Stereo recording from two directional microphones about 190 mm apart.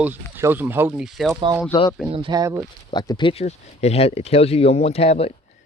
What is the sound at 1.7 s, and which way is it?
Speech, 25° left (ahead or behind).